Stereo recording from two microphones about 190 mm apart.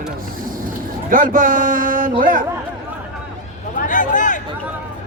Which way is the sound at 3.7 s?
45° left (ahead or behind).